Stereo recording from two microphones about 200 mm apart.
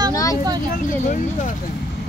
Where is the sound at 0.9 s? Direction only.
40° left (ahead or behind).